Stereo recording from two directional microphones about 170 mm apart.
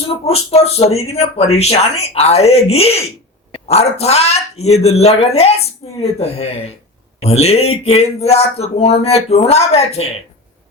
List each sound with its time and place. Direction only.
0.3 s speech: 35° left (ahead or behind)